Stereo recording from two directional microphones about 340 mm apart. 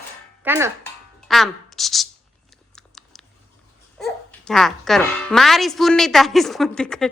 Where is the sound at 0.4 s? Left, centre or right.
Centre.